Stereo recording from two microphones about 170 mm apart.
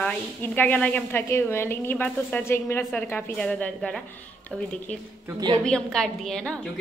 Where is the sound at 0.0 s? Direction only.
10° left (ahead or behind).